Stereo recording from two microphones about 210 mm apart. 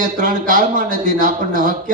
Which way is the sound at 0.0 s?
40° right (ahead or behind).